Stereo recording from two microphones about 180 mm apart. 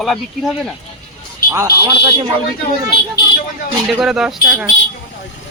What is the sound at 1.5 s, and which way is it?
Speech, 15° right (ahead or behind).